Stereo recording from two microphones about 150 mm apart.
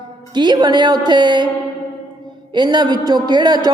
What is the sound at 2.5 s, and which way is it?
Speech, 30° right (ahead or behind).